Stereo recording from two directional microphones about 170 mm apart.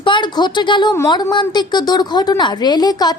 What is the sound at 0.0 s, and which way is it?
A woman's voice, 25° left (ahead or behind).